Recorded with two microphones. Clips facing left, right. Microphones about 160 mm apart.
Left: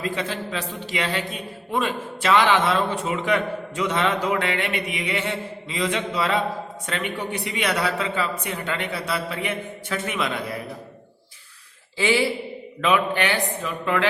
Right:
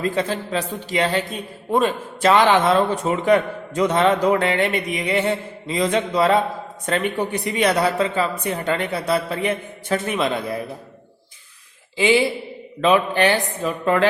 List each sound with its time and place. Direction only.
0.2 s a man's voice: 40° right (ahead or behind)
11.9 s speech: 20° right (ahead or behind)
12.8 s a man's voice: 35° right (ahead or behind)